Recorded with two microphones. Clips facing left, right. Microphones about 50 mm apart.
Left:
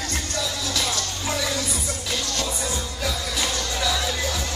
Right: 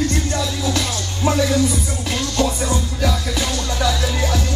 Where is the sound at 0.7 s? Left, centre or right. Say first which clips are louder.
Right 3 dB; right.